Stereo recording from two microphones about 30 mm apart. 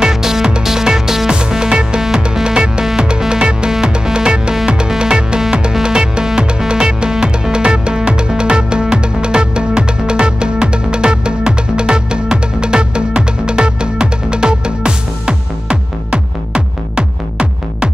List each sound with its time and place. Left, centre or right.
0.0 s music: centre
1.5 s music: right